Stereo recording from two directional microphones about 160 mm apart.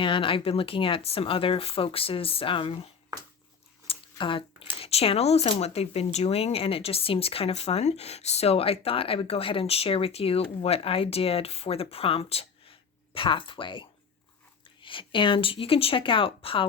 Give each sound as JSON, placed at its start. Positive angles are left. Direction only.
{"t": 0.0, "sound": "speech", "side_deg": 35}
{"t": 3.8, "sound": "a sound", "side_deg": 30}
{"t": 4.8, "sound": "speech", "side_deg": 40}